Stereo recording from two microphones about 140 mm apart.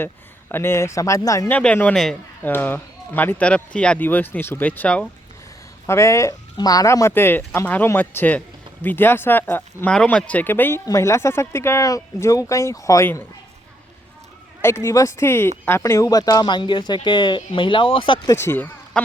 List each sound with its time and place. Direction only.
0.0 s speech: 15° left (ahead or behind)
1.5 s speech: 10° left (ahead or behind)
14.6 s speech: 20° left (ahead or behind); by 18.2 s 40° left (ahead or behind)
18.3 s speech: 20° left (ahead or behind)